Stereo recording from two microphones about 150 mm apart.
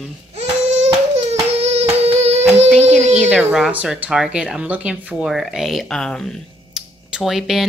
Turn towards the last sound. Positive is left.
turn(degrees=0)  # may be behind; listen again after turning